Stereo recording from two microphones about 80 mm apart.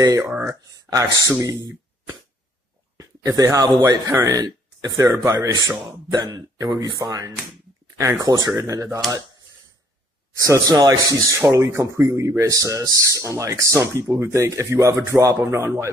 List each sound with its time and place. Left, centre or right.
0.0 s speech: right
3.0 s speech: right
6.1 s speech: right
8.0 s speech: right
10.4 s speech: right